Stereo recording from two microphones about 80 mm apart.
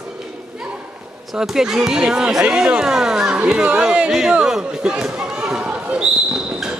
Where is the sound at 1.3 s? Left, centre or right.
Centre.